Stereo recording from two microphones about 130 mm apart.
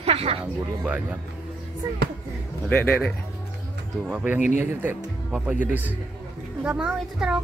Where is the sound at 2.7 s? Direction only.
10° left (ahead or behind).